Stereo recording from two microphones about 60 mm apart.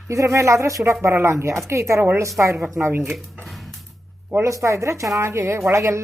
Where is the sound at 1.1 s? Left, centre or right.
Right.